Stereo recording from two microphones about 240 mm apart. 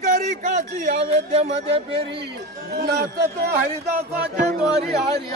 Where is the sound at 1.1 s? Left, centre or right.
Right.